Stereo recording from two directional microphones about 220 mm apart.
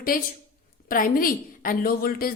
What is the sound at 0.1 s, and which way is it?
A woman's voice, 40° left (ahead or behind).